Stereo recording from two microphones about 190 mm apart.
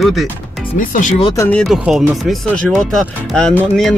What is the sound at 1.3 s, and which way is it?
Speech, 15° left (ahead or behind).